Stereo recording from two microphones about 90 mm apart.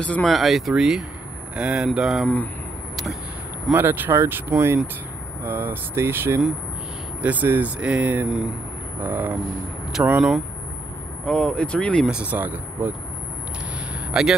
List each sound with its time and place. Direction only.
0.0 s speech: 15° left (ahead or behind)
0.3 s speech: centre (ahead or behind)
3.7 s speech: 20° right (ahead or behind)
10.0 s speech: 35° right (ahead or behind)
11.2 s speech: 10° left (ahead or behind)
12.1 s speech: 15° right (ahead or behind)
14.2 s speech: 5° right (ahead or behind)